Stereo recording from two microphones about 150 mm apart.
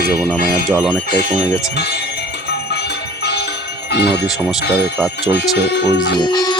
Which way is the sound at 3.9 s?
90° left.